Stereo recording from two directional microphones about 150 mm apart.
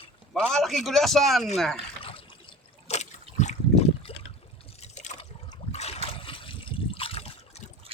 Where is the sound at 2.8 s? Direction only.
50° left (ahead or behind).